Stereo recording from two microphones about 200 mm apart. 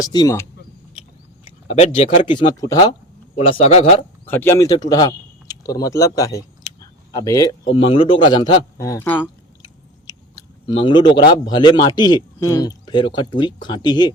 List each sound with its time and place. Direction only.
0.1 s speech: 20° left (ahead or behind)
1.5 s speech: 30° left (ahead or behind)
3.3 s speech: 30° left (ahead or behind)
4.3 s a man's voice: 10° left (ahead or behind)
7.7 s speech: 30° left (ahead or behind); by 9.3 s 10° left (ahead or behind)
10.1 s a sound: 20° left (ahead or behind)
11.3 s speech: 20° left (ahead or behind)